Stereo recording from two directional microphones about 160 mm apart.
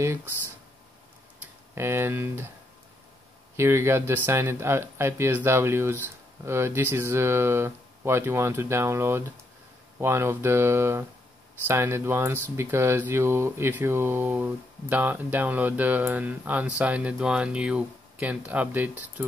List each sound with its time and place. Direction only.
0.0 s speech: 15° right (ahead or behind)
1.4 s speech: 15° right (ahead or behind)
3.5 s speech: 15° right (ahead or behind)